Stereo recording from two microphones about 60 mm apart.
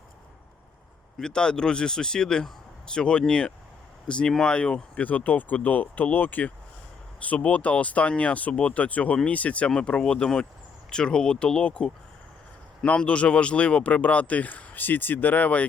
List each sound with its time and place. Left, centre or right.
1.2 s speech: centre